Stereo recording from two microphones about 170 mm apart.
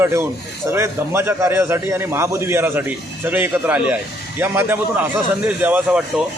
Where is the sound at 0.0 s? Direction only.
15° right (ahead or behind).